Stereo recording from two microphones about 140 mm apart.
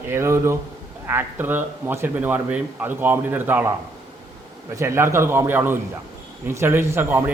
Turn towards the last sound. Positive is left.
turn(degrees=-15)  # may be behind; listen again after turning